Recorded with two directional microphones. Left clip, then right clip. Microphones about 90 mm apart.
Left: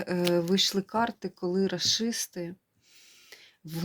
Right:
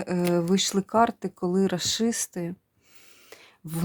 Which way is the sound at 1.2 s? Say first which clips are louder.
Right 3 dB; 90° right.